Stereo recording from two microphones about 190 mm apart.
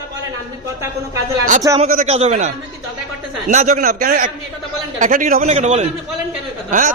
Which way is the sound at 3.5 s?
40° right (ahead or behind).